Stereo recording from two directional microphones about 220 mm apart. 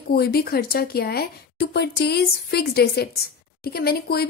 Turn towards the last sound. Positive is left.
turn(degrees=45)  # may be behind; listen again after turning